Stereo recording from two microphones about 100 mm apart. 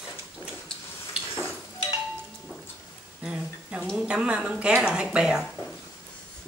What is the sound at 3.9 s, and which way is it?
Speech, 10° right (ahead or behind).